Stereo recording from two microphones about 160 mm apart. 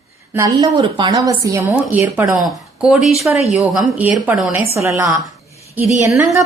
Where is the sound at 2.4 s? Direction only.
5° right (ahead or behind).